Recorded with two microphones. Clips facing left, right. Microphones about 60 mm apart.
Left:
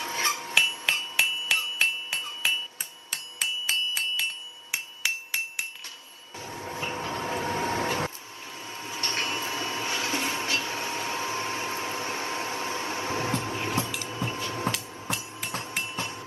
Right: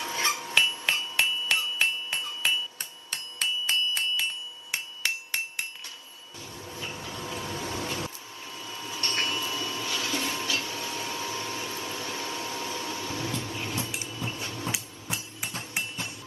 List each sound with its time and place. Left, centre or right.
0.0 s hammer: left
1.5 s music: centre
3.1 s music: centre
4.6 s hammer: centre
6.7 s vehicle: left
8.6 s printer: left